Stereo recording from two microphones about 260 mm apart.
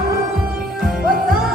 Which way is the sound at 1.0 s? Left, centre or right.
Right.